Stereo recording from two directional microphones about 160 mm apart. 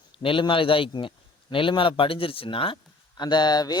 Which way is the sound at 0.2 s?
30° left (ahead or behind).